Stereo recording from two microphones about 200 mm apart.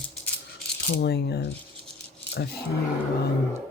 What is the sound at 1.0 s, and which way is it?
Speech, 55° left (ahead or behind).